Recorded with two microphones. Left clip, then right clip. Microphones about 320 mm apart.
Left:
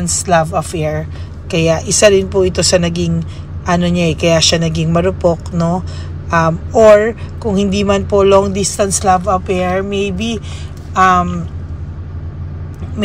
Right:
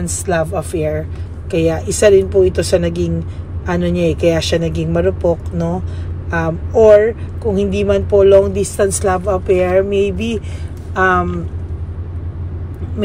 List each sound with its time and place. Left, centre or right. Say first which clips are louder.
0.0 s speech: left 5 dB; centre
5.2 s speech: left 2 dB; left
6.8 s speech: left 1 dB; centre